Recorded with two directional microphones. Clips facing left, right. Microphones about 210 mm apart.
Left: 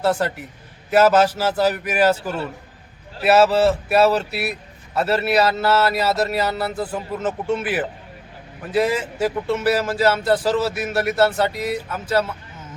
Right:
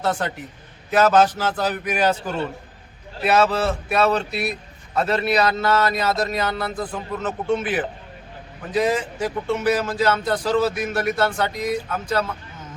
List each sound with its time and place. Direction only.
0.0 s a man's voice: 5° left (ahead or behind)